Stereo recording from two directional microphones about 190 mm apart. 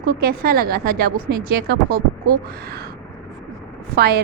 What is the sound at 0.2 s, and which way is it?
A woman's voice, 50° right (ahead or behind).